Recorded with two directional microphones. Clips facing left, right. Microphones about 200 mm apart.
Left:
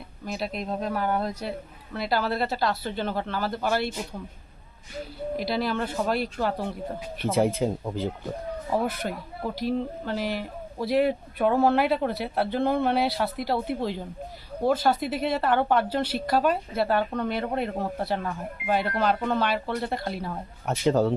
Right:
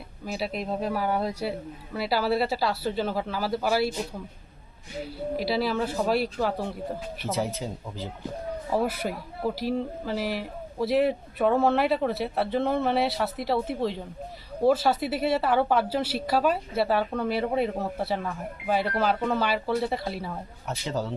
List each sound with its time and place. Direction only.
0.3 s a man's voice: 5° right (ahead or behind)
5.4 s speech: 5° right (ahead or behind)
7.2 s speech: 55° left (ahead or behind)
8.7 s a man's voice: 5° right (ahead or behind)
20.7 s speech: 55° left (ahead or behind)